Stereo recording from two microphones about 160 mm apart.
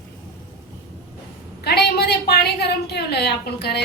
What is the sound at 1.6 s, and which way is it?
A woman's voice, 90° left.